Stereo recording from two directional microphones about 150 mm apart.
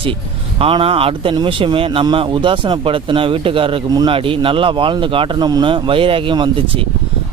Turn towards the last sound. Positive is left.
turn(degrees=-35)  # may be behind; listen again after turning